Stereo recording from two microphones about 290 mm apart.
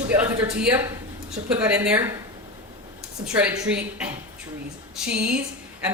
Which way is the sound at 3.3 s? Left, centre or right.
Centre.